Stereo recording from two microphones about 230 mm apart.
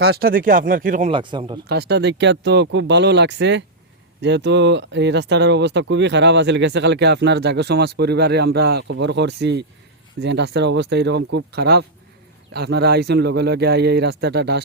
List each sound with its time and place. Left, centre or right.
0.0 s speech: right
1.1 s speech: right
1.6 s speech: right